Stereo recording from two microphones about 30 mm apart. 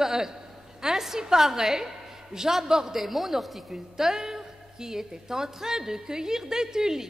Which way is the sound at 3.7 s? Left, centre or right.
Centre.